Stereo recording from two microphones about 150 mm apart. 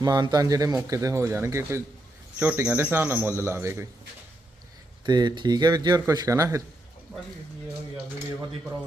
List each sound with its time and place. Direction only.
0.0 s speech: 25° right (ahead or behind)
5.0 s speech: 30° right (ahead or behind)